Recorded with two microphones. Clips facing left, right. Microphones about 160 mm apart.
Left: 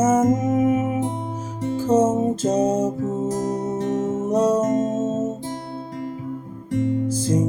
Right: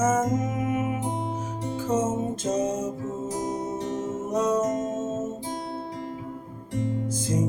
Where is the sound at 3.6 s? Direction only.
50° left (ahead or behind).